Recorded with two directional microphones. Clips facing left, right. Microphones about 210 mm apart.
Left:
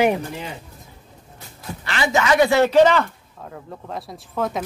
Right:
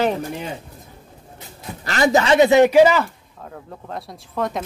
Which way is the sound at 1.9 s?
40° right (ahead or behind).